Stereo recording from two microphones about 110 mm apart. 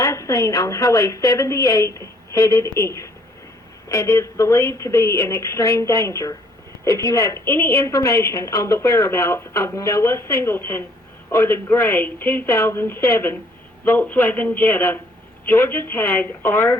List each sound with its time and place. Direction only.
0.0 s a man's voice: 30° left (ahead or behind)